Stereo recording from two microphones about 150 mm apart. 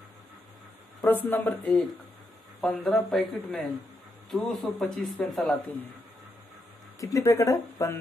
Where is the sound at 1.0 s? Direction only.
15° left (ahead or behind).